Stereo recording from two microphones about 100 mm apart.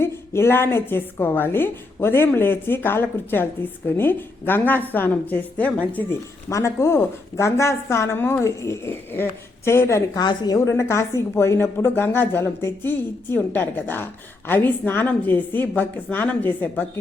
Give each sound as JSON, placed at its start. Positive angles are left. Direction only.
{"t": 0.0, "sound": "a woman's voice", "side_deg": 25}
{"t": 6.1, "sound": "a woman's voice", "side_deg": 30}
{"t": 10.2, "sound": "a woman's voice", "side_deg": 40}
{"t": 10.8, "sound": "a woman's voice", "side_deg": 30}